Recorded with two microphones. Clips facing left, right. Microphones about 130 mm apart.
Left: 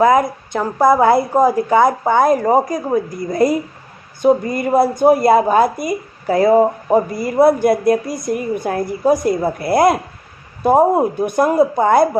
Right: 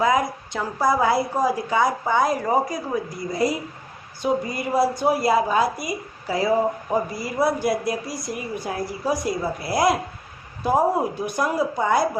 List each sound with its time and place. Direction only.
0.0 s a woman's voice: 50° left (ahead or behind)